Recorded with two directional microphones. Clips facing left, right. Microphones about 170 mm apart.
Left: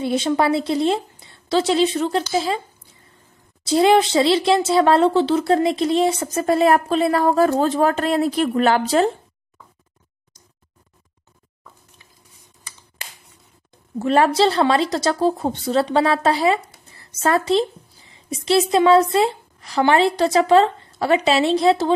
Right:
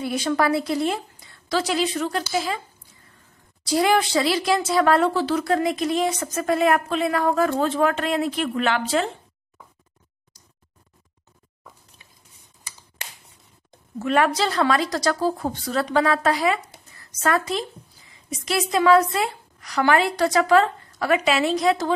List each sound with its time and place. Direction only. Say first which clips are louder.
0.0 s speech: left 3 dB; 25° left (ahead or behind)
3.6 s speech: left 5 dB; 25° left (ahead or behind)
13.9 s a woman's voice: left 4 dB; 30° left (ahead or behind)